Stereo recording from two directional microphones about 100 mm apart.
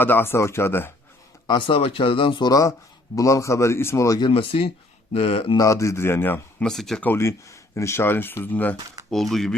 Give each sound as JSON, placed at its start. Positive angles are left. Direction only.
{"t": 0.0, "sound": "speech", "side_deg": 20}
{"t": 1.5, "sound": "speech", "side_deg": 55}
{"t": 2.5, "sound": "a man's voice", "side_deg": 35}
{"t": 4.3, "sound": "speech", "side_deg": 65}
{"t": 5.1, "sound": "speech", "side_deg": 80}
{"t": 5.5, "sound": "speech", "side_deg": 30}
{"t": 6.7, "sound": "speech", "side_deg": 5}
{"t": 7.0, "sound": "speech", "side_deg": 25}
{"t": 9.0, "sound": "speech", "side_deg": 5}